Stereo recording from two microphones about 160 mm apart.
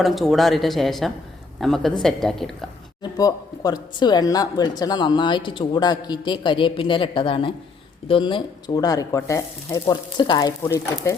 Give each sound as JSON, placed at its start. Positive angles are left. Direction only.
{"t": 0.0, "sound": "speech", "side_deg": 0}
{"t": 3.0, "sound": "a man's voice", "side_deg": 25}